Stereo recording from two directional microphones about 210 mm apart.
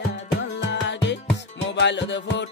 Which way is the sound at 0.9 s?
55° left (ahead or behind).